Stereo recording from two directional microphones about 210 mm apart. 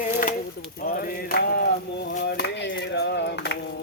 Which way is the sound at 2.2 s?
50° left (ahead or behind).